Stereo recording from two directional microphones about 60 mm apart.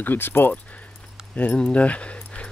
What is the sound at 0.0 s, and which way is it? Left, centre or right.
Speech, left.